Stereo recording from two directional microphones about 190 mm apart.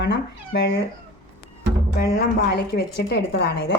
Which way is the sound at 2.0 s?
55° left (ahead or behind).